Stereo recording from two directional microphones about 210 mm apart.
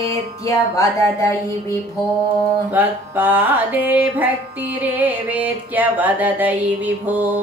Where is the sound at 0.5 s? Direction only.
15° left (ahead or behind).